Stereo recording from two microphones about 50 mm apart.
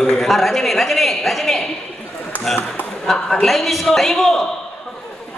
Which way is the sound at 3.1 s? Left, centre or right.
Centre.